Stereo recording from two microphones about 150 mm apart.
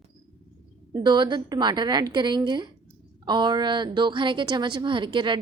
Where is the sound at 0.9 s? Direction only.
30° right (ahead or behind).